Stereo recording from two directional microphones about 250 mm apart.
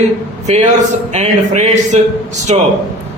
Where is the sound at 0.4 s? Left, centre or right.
Right.